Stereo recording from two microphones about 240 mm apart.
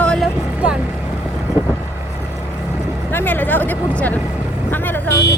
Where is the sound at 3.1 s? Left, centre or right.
Centre.